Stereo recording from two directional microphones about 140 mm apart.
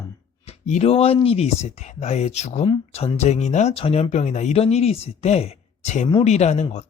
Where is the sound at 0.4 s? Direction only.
50° left (ahead or behind).